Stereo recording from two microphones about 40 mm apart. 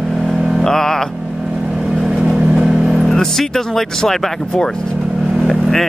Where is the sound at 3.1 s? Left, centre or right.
Centre.